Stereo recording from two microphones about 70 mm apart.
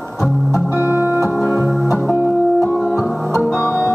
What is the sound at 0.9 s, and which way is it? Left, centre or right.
Music, right.